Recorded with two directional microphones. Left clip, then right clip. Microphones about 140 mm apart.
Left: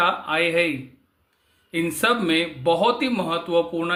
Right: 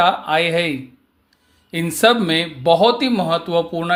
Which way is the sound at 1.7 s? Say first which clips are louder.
Right 6 dB; 40° right (ahead or behind).